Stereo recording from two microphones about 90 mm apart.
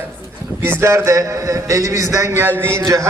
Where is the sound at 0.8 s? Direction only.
35° right (ahead or behind).